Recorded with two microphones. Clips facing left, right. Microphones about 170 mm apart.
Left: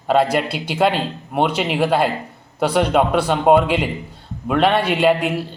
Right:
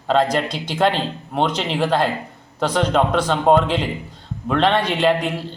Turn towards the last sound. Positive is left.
turn(degrees=10)  # may be behind; listen again after turning